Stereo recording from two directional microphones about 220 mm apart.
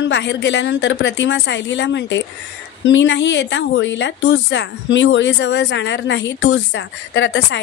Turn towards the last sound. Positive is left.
turn(degrees=55)  # may be behind; listen again after turning